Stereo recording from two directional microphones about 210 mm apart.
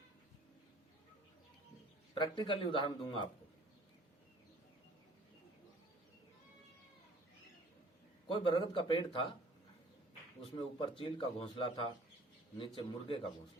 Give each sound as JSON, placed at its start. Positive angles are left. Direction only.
{"t": 2.1, "sound": "speech", "side_deg": 20}
{"t": 8.3, "sound": "speech", "side_deg": 20}
{"t": 10.4, "sound": "speech", "side_deg": 25}